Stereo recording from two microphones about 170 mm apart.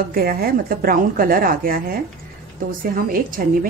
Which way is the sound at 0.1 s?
60° right (ahead or behind).